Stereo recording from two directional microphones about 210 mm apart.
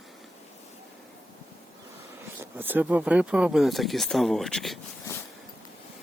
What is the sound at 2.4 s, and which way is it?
Speech, 10° right (ahead or behind).